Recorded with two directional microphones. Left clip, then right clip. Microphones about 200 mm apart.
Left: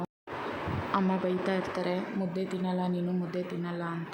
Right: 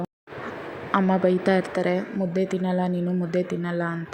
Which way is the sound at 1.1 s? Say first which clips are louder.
Right 9 dB; 25° right (ahead or behind).